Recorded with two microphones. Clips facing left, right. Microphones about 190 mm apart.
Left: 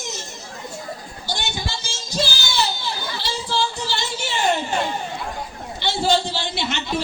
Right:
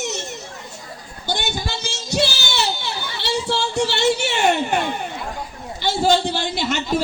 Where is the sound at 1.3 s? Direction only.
55° right (ahead or behind); by 4.8 s 70° right (ahead or behind).